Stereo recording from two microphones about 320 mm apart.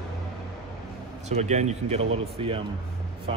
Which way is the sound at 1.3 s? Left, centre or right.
Right.